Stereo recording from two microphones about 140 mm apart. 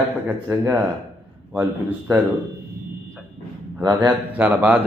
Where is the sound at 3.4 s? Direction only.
65° left (ahead or behind).